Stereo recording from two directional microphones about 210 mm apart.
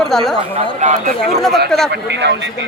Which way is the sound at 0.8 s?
35° right (ahead or behind).